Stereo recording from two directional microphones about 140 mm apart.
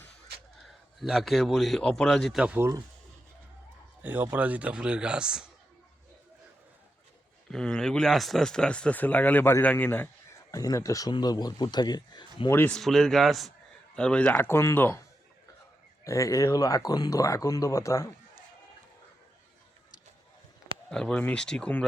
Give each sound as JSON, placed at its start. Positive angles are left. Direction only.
{"t": 0.7, "sound": "a man's voice", "side_deg": 0}
{"t": 2.4, "sound": "a man's voice", "side_deg": -10}
{"t": 4.0, "sound": "a man's voice", "side_deg": -15}
{"t": 7.5, "sound": "speech", "side_deg": 5}
{"t": 10.5, "sound": "speech", "side_deg": 25}
{"t": 12.5, "sound": "speech", "side_deg": 15}
{"t": 12.7, "sound": "a man's voice", "side_deg": 5}
{"t": 16.0, "sound": "speech", "side_deg": 20}
{"t": 20.9, "sound": "speech", "side_deg": 5}